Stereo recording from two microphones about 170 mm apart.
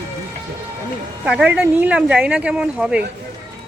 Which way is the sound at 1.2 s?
5° right (ahead or behind).